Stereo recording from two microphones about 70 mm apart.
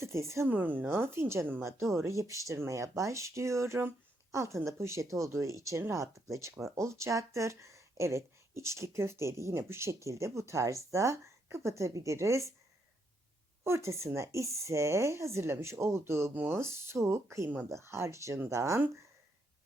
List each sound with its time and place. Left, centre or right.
0.0 s speech: right
0.4 s a woman's voice: right
13.7 s speech: right
16.3 s speech: right
16.6 s a woman's voice: right